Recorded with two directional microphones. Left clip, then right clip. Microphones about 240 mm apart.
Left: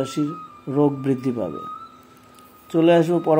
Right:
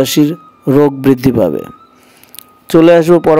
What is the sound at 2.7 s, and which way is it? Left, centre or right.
Speech, right.